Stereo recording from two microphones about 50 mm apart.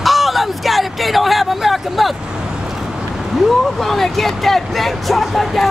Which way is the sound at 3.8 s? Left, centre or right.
Centre.